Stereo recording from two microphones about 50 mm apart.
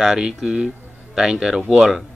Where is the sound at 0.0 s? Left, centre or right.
Centre.